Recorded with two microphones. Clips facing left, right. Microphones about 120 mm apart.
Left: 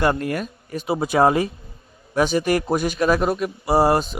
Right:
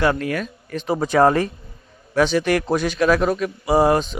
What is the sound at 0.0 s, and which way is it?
A man's voice, 10° left (ahead or behind).